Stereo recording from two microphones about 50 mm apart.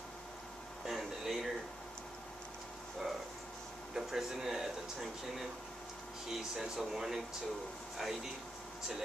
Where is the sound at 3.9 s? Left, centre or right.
Centre.